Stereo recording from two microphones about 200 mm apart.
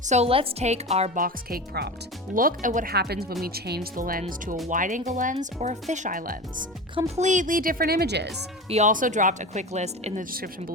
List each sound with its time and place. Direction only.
0.0 s a woman's voice: 35° right (ahead or behind); by 8.3 s 55° right (ahead or behind)
8.7 s a woman's voice: 40° right (ahead or behind)